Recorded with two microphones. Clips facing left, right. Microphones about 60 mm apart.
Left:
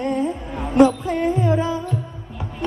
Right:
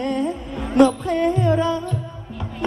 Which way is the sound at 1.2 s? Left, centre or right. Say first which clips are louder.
Right 3 dB; centre.